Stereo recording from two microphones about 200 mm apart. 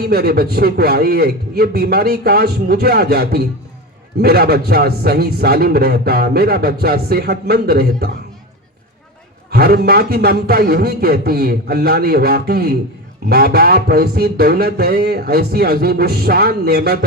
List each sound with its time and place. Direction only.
0.0 s a man's voice: 50° right (ahead or behind)
9.5 s a man's voice: 50° right (ahead or behind)